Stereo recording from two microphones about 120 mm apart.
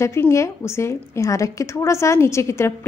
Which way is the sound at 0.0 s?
25° left (ahead or behind).